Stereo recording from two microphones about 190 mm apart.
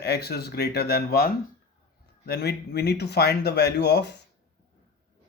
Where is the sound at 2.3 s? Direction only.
60° left (ahead or behind).